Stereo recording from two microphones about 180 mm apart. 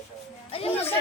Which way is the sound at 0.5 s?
30° left (ahead or behind).